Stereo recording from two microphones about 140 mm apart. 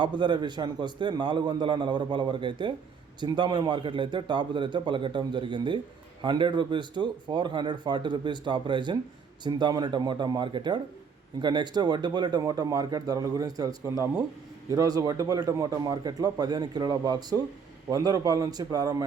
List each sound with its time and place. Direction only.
0.2 s speech: 35° right (ahead or behind)